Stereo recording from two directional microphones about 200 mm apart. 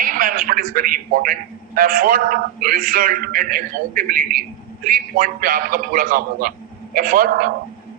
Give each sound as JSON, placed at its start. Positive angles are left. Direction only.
{"t": 0.0, "sound": "a man's voice", "side_deg": -45}